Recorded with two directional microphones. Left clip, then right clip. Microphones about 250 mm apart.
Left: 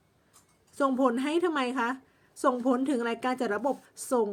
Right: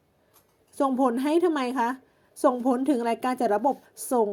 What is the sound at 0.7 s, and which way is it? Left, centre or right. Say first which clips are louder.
A woman's voice: right 2 dB; centre.